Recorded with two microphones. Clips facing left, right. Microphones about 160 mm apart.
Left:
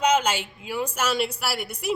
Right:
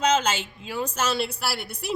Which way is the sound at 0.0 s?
10° left (ahead or behind).